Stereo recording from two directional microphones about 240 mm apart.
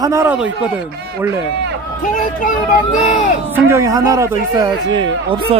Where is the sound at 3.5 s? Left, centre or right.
Centre.